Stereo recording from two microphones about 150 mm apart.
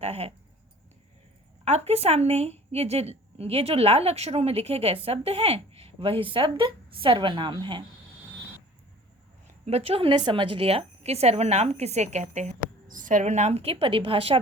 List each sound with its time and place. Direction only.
0.0 s a sound: 40° right (ahead or behind)
1.6 s a woman's voice: 45° right (ahead or behind)
9.6 s a woman's voice: 40° right (ahead or behind)